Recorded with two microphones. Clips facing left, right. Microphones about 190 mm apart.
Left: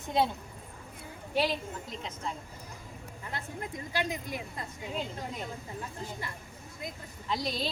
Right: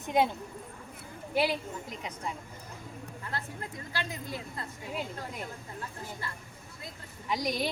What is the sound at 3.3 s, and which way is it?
A woman's voice, 15° left (ahead or behind).